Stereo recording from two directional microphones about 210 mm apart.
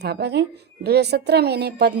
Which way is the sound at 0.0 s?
55° right (ahead or behind).